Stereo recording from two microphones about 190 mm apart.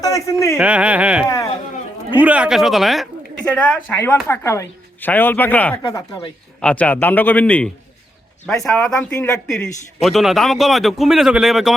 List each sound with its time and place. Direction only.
0.0 s a woman's voice: 15° left (ahead or behind)
0.5 s a woman's voice: 5° right (ahead or behind); by 6.3 s 20° left (ahead or behind)
6.6 s a woman's voice: 5° left (ahead or behind)